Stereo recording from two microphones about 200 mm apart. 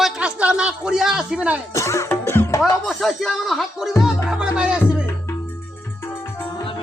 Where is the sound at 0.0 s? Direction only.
5° right (ahead or behind).